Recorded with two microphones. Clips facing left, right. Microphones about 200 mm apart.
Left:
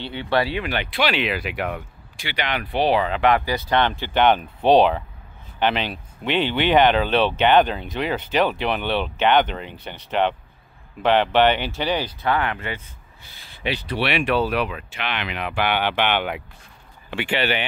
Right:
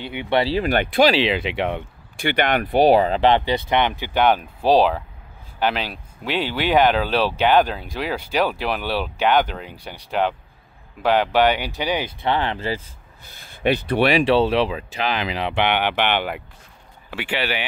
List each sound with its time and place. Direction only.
0.1 s speech: 20° right (ahead or behind)
0.6 s speech: 45° right (ahead or behind)
1.1 s speech: 25° right (ahead or behind)
2.1 s speech: 55° right (ahead or behind); by 4.1 s 15° right (ahead or behind)
4.1 s speech: 5° right (ahead or behind)
12.2 s speech: 30° right (ahead or behind)
13.3 s speech: 50° right (ahead or behind)
14.1 s speech: 30° right (ahead or behind); by 17.6 s 5° right (ahead or behind)